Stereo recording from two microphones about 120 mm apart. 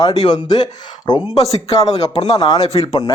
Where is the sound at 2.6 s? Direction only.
55° left (ahead or behind).